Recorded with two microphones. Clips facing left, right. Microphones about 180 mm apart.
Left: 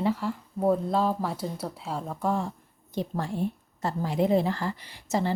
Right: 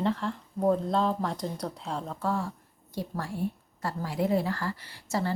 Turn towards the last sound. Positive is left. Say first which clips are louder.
# left 3 dB
turn(degrees=20)  # may be behind; listen again after turning